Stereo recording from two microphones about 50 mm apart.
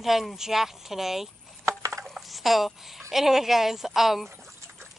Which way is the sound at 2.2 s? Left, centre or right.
Centre.